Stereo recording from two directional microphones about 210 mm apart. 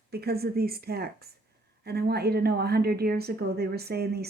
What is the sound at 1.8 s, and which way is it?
A woman's voice, 50° right (ahead or behind).